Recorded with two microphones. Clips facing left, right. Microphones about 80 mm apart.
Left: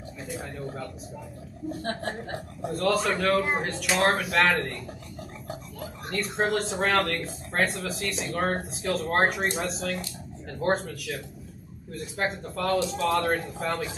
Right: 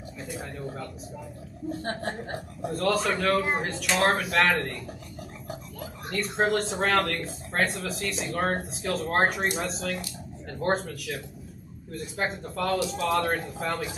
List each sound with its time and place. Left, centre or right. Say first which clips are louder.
0.2 s speech: left 1 dB; centre
1.7 s a woman's voice: even; right
2.6 s speech: left 1 dB; centre